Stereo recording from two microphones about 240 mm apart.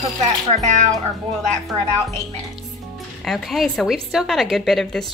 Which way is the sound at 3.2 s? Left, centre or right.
Centre.